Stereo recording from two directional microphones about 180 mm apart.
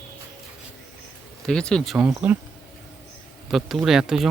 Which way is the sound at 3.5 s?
Centre (ahead or behind).